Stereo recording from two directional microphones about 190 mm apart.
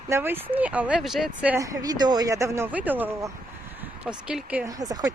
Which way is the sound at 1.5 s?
15° right (ahead or behind).